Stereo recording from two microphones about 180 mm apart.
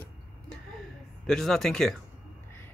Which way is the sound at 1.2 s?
Centre (ahead or behind).